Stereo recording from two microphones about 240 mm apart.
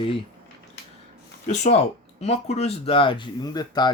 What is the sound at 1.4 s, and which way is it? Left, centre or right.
Speech, left.